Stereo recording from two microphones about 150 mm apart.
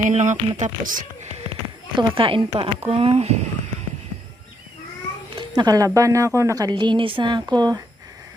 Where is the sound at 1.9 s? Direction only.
35° right (ahead or behind).